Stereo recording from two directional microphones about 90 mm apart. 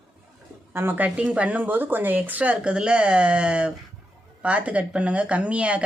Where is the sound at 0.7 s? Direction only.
25° right (ahead or behind).